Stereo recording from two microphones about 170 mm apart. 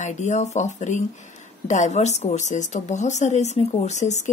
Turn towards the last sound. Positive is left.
turn(degrees=45)  # may be behind; listen again after turning